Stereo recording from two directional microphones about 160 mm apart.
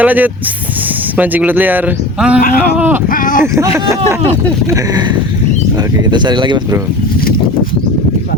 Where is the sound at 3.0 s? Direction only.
60° left (ahead or behind).